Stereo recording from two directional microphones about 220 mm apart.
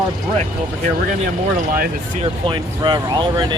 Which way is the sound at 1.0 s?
35° right (ahead or behind).